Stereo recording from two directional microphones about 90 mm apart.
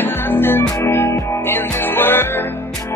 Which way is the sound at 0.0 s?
25° left (ahead or behind).